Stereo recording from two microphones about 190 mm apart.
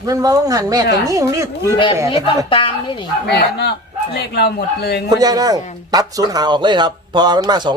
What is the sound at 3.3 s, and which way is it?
Speech, 60° left (ahead or behind).